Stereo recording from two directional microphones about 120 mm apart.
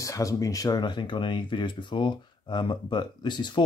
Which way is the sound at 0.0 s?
30° left (ahead or behind).